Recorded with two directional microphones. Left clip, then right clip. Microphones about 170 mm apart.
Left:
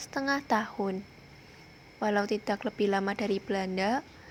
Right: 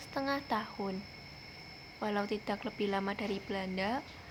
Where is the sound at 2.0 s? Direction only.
35° left (ahead or behind).